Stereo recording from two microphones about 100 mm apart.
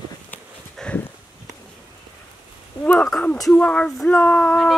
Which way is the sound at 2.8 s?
10° left (ahead or behind).